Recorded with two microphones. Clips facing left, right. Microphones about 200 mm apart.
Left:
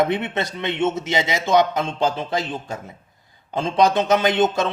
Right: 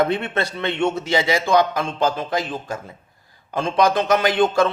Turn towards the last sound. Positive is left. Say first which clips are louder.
# right 1 dB
turn(degrees=20)  # may be behind; listen again after turning